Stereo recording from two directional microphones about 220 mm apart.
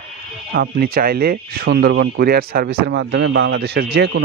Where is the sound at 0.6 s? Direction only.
45° right (ahead or behind).